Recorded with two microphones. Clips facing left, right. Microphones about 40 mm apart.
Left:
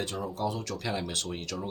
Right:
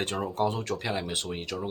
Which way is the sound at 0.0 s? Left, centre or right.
Right.